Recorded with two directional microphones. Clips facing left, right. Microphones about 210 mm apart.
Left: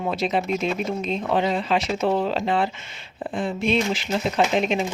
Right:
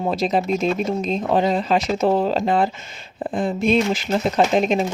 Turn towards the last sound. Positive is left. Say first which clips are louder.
# right 3 dB
turn(degrees=-40)  # may be behind; listen again after turning